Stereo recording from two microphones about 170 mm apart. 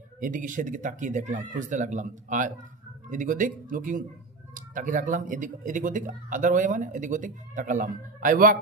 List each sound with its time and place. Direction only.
0.2 s speech: 50° right (ahead or behind)